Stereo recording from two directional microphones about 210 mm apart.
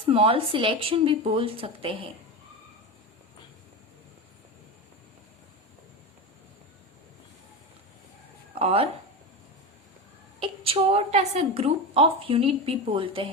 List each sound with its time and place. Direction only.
0.0 s a woman's voice: 25° right (ahead or behind)
8.5 s speech: 30° right (ahead or behind)
10.4 s a woman's voice: 25° right (ahead or behind)